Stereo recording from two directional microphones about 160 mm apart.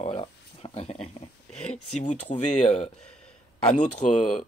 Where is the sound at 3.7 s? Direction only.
50° left (ahead or behind).